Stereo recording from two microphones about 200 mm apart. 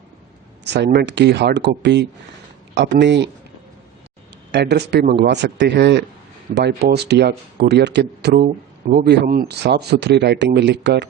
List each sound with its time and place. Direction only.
0.6 s speech: 55° right (ahead or behind)
4.5 s a man's voice: 55° right (ahead or behind)